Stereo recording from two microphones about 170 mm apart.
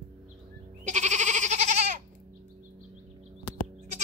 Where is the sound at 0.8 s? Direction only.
45° right (ahead or behind).